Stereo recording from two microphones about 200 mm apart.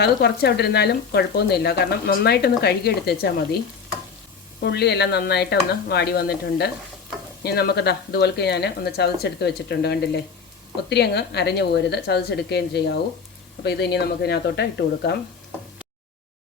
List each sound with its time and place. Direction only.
0.0 s speech: 55° left (ahead or behind)
4.6 s speech: 55° left (ahead or behind)